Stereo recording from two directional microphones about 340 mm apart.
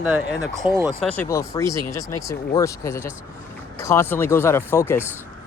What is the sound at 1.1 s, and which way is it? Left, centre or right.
Speech, centre.